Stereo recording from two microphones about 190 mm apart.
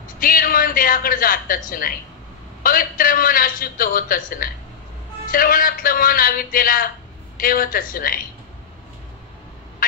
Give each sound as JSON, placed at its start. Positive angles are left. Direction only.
{"t": 0.2, "sound": "a man's voice", "side_deg": 50}